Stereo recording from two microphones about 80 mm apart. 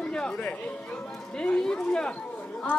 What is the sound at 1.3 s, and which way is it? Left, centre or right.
Speech, centre.